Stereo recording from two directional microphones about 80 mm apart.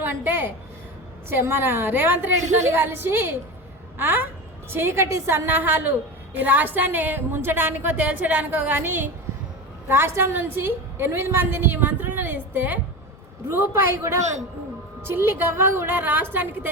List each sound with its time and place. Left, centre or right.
0.0 s a woman's voice: right
13.5 s a man's voice: right